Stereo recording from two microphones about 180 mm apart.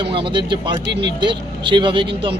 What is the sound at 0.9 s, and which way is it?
Speech, 70° right (ahead or behind).